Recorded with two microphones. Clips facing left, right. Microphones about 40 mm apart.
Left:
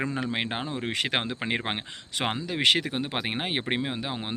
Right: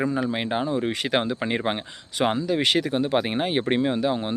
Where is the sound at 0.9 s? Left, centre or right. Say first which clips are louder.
Right 3 dB; left.